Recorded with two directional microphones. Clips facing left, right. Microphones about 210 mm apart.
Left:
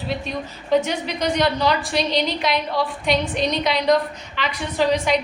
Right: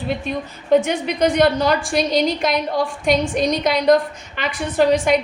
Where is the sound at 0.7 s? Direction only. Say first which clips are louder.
Right 4 dB; 55° right (ahead or behind).